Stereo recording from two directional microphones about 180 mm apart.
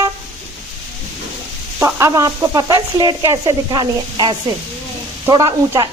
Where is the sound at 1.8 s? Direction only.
20° right (ahead or behind).